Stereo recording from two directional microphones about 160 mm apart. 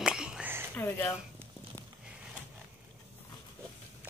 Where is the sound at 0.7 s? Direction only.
10° left (ahead or behind).